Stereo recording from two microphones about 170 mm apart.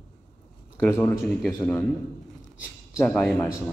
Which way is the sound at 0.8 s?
15° left (ahead or behind).